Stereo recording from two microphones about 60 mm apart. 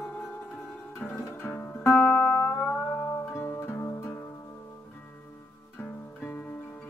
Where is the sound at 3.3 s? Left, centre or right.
Left.